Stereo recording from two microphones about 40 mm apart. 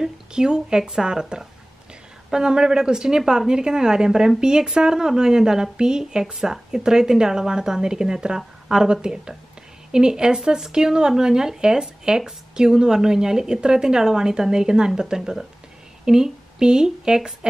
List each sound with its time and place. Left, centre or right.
0.0 s speech: centre
8.4 s a sound: centre
8.8 s speech: centre